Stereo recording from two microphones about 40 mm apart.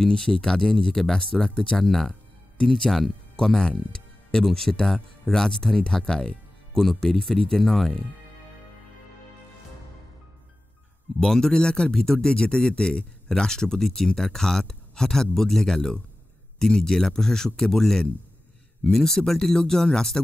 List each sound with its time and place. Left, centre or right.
0.1 s speech: centre
1.9 s speech: centre
11.1 s speech: centre